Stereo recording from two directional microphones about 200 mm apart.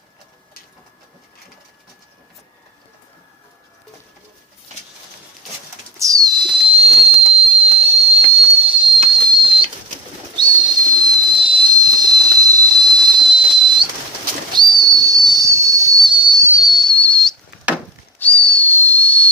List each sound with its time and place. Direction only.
6.0 s pigeon: 15° right (ahead or behind)
9.3 s a sound: 25° right (ahead or behind)
14.5 s whistle: 20° right (ahead or behind)
16.5 s whistle: centre (ahead or behind)